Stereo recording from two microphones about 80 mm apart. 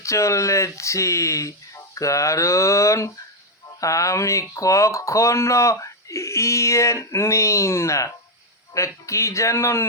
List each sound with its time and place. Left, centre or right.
0.0 s speech: left